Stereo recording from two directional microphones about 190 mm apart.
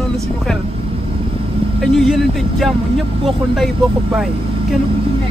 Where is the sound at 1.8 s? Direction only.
Centre (ahead or behind).